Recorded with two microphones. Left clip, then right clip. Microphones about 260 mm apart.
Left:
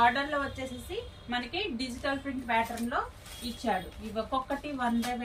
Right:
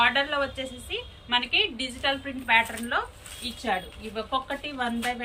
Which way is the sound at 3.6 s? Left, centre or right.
Centre.